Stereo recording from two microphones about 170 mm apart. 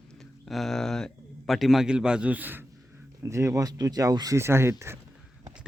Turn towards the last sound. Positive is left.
turn(degrees=-15)  # may be behind; listen again after turning